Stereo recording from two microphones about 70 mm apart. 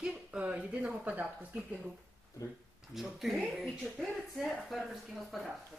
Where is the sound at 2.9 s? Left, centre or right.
Centre.